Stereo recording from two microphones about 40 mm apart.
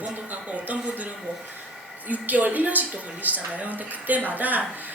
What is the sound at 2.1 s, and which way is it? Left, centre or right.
Speech, right.